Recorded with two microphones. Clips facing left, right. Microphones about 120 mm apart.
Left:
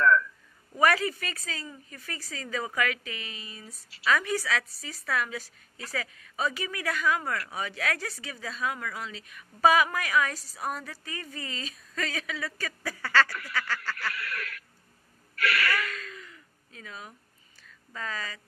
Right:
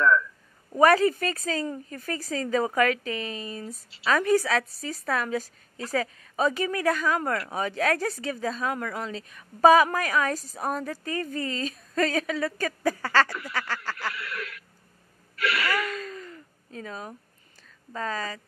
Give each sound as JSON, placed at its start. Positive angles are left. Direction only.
{"t": 0.7, "sound": "a woman's voice", "side_deg": -35}
{"t": 3.9, "sound": "a woman's voice", "side_deg": -30}
{"t": 13.3, "sound": "speech", "side_deg": -25}
{"t": 15.3, "sound": "wheeze", "side_deg": -20}
{"t": 16.1, "sound": "a sound", "side_deg": -40}
{"t": 17.9, "sound": "a woman's voice", "side_deg": -35}